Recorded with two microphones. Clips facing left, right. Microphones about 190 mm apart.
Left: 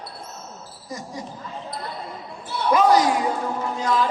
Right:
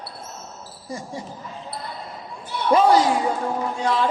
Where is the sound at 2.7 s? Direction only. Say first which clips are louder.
Right 1 dB; 30° right (ahead or behind).